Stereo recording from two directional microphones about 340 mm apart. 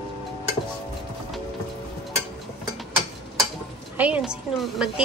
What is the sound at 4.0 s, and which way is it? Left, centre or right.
A woman's voice, centre.